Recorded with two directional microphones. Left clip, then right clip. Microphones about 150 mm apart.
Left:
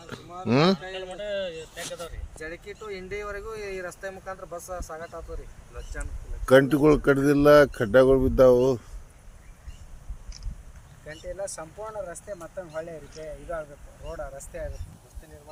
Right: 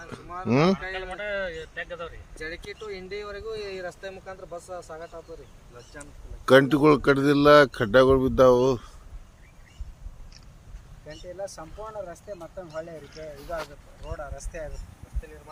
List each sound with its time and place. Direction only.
0.4 s speech: 10° right (ahead or behind)
0.8 s a sound: 25° left (ahead or behind)
1.7 s speech: 15° left (ahead or behind)
2.4 s a man's voice: 5° right (ahead or behind)
3.1 s speech: 15° right (ahead or behind)
5.7 s a man's voice: 5° left (ahead or behind)
11.3 s speech: 20° left (ahead or behind)